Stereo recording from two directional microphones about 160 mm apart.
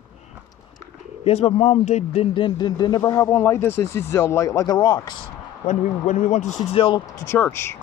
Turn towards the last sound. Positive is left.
turn(degrees=15)  # may be behind; listen again after turning